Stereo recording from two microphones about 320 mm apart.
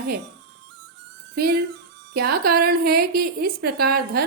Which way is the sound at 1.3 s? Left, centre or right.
Right.